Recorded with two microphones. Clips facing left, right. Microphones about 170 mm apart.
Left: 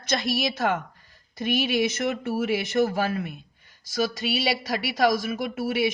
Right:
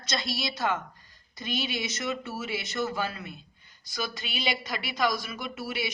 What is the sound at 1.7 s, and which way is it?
Speech, 55° left (ahead or behind).